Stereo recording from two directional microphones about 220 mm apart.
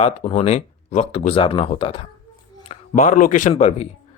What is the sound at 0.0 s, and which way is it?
A man's voice, 35° left (ahead or behind).